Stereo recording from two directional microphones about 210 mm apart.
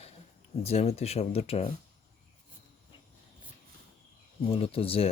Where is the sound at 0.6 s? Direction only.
30° left (ahead or behind).